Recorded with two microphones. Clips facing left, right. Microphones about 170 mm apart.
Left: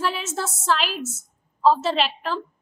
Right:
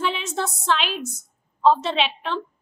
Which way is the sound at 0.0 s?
5° left (ahead or behind).